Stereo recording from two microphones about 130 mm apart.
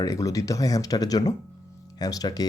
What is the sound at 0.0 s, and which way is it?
Speech, 25° left (ahead or behind).